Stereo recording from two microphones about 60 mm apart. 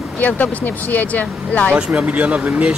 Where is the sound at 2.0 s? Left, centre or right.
Right.